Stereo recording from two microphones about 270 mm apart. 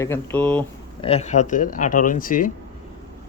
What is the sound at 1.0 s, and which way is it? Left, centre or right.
Speech, left.